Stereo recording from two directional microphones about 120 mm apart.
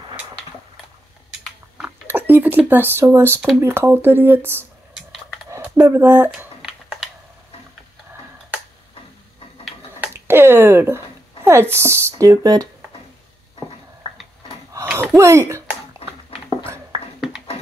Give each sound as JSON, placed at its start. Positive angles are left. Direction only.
{"t": 1.8, "sound": "a sound", "side_deg": -15}
{"t": 3.6, "sound": "speech", "side_deg": -20}
{"t": 5.8, "sound": "speech", "side_deg": -20}
{"t": 9.9, "sound": "a sound", "side_deg": -15}
{"t": 11.4, "sound": "speech", "side_deg": -20}
{"t": 15.0, "sound": "speech", "side_deg": -20}